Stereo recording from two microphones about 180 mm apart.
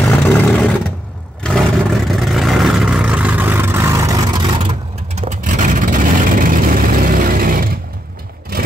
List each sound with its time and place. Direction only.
0.0 s a sound: 5° left (ahead or behind)
1.4 s vehicle: centre (ahead or behind); by 4.1 s 15° right (ahead or behind)
4.6 s vehicle: 30° right (ahead or behind)
5.3 s vehicle: 45° right (ahead or behind)